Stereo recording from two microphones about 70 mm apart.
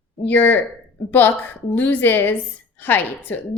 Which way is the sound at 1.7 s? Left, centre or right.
Left.